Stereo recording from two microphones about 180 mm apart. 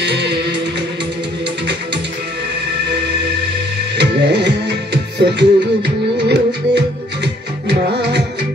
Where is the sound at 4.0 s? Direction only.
75° right (ahead or behind).